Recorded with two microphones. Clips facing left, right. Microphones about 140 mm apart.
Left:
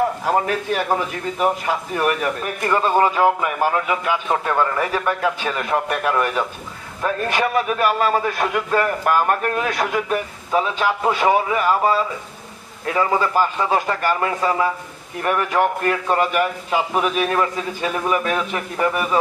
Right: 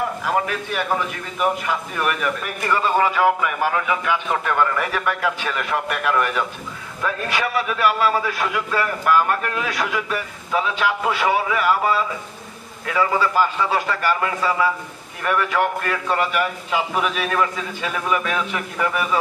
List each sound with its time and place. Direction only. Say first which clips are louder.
0.2 s a man's voice: left 3 dB; 35° left (ahead or behind)
13.4 s a man's voice: left 1 dB; 40° left (ahead or behind)